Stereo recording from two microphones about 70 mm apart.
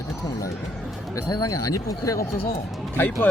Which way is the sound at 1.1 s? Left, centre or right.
Left.